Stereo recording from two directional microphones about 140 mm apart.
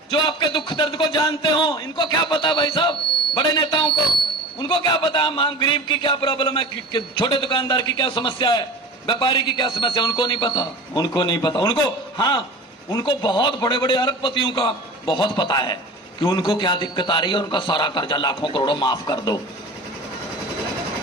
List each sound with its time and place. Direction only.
0.1 s a man's voice: 35° left (ahead or behind)